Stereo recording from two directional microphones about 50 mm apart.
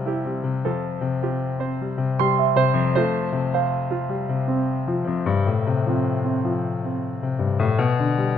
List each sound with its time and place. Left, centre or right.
2.5 s music: centre
5.1 s music: centre
7.6 s music: centre